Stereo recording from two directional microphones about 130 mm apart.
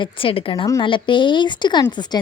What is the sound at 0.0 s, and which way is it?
Speech, 45° left (ahead or behind).